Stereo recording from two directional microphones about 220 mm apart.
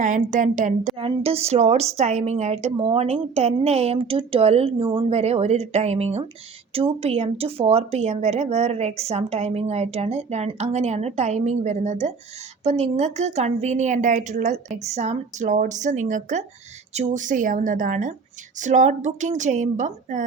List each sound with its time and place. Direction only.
0.0 s a woman's voice: 35° right (ahead or behind)